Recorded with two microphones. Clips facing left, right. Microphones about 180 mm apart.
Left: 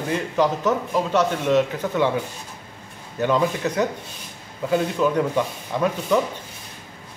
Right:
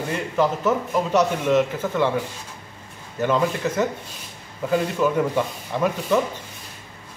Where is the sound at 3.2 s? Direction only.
Centre (ahead or behind).